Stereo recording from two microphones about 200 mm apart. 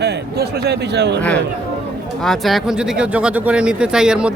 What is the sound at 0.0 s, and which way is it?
A man's voice, 55° right (ahead or behind).